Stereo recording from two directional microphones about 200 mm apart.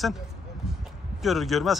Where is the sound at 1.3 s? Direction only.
Centre (ahead or behind).